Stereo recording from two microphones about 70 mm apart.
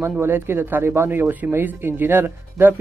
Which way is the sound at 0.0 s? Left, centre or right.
Right.